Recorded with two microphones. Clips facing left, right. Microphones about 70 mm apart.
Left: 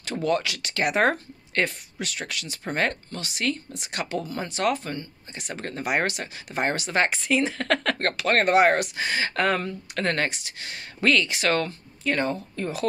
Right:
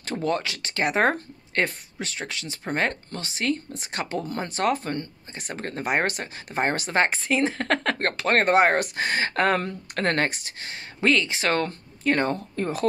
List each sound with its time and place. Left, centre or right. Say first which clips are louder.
0.0 s speech: left 1 dB; right
11.0 s speech: even; right